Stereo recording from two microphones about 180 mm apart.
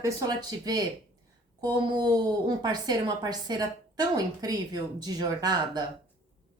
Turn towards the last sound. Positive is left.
turn(degrees=-25)  # may be behind; listen again after turning